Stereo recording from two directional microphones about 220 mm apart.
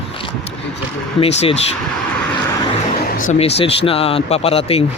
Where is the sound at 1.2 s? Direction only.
25° left (ahead or behind).